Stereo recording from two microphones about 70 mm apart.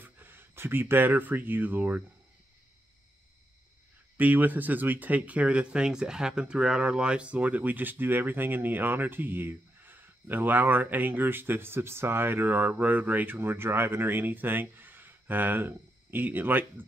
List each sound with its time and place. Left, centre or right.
0.0 s speech: right
4.2 s speech: right